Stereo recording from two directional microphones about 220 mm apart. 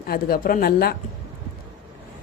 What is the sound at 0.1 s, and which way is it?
Speech, 45° left (ahead or behind).